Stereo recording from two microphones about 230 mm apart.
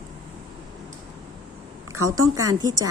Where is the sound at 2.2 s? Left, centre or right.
Centre.